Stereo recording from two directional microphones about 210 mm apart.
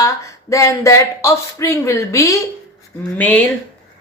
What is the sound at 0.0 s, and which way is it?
Speech, 15° left (ahead or behind).